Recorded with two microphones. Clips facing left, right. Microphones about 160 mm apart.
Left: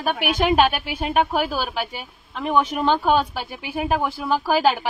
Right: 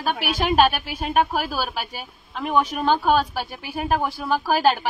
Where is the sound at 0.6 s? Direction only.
15° left (ahead or behind).